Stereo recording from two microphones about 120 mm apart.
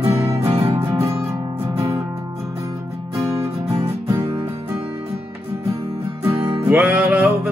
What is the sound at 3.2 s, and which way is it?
Music, 25° right (ahead or behind).